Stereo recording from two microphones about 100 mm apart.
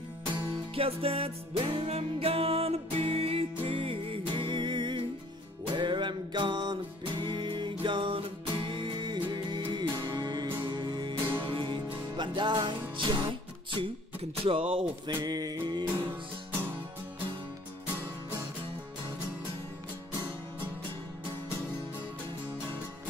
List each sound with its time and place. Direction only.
0.7 s music: 70° right (ahead or behind); by 13.8 s 50° right (ahead or behind)
14.4 s music: 65° right (ahead or behind); by 15.5 s 40° right (ahead or behind)